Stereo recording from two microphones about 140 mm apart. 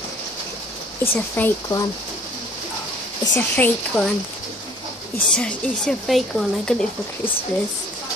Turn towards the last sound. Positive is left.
turn(degrees=5)  # may be behind; listen again after turning